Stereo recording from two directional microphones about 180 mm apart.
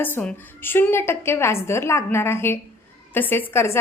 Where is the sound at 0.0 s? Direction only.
10° left (ahead or behind).